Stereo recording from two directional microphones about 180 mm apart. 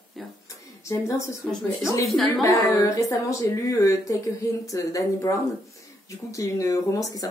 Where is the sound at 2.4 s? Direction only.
20° left (ahead or behind).